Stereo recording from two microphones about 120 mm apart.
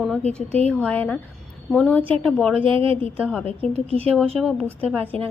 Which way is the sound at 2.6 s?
45° right (ahead or behind).